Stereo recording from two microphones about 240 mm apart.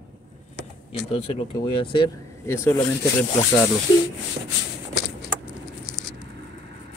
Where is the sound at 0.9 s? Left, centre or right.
Left.